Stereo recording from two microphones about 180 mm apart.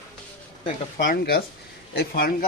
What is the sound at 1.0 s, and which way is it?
Speech, 55° left (ahead or behind).